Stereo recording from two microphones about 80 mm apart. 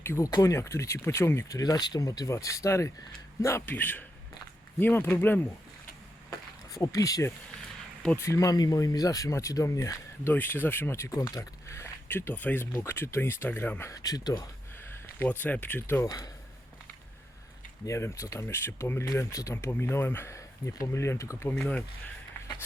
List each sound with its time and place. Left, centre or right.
0.0 s speech: left
1.5 s speech: left
6.7 s speech: left
10.2 s speech: left
11.1 s speech: left
12.7 s speech: left
13.9 s speech: left
15.2 s speech: left
16.0 s speech: left
17.8 s speech: left
19.8 s speech: left
21.5 s speech: centre